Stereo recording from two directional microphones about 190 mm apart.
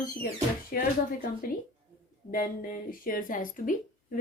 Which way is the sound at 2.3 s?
45° left (ahead or behind).